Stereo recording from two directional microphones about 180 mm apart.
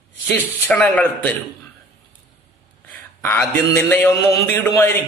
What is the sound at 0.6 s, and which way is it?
Mantra, 10° left (ahead or behind).